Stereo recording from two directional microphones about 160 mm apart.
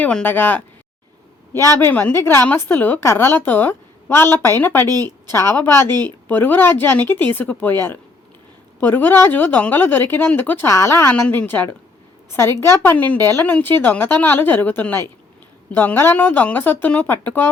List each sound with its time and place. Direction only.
0.0 s a woman's voice: 10° left (ahead or behind)
1.8 s a woman's voice: 10° left (ahead or behind)
4.9 s a woman's voice: 25° right (ahead or behind)
5.3 s a woman's voice: 15° left (ahead or behind)